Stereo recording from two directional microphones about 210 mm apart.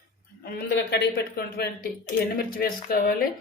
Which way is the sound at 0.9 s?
50° left (ahead or behind).